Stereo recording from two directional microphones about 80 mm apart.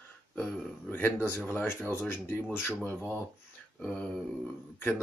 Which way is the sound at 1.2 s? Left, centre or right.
Left.